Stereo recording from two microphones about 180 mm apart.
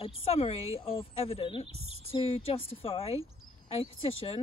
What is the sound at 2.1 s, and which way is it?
Speech, 35° left (ahead or behind).